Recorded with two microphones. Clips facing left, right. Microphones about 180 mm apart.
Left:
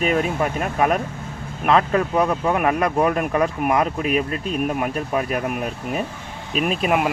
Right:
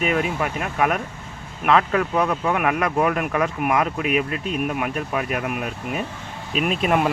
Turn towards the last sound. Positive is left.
turn(degrees=5)  # may be behind; listen again after turning